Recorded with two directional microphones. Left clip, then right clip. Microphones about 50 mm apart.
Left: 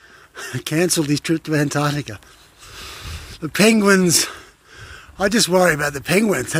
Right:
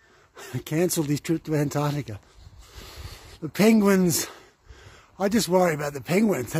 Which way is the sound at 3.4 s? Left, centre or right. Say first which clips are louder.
Left 6 dB; right.